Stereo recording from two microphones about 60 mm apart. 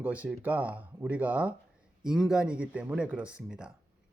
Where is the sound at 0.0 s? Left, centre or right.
Right.